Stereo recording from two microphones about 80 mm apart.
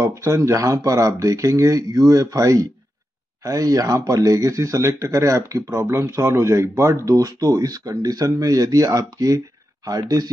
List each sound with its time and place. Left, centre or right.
0.0 s speech: right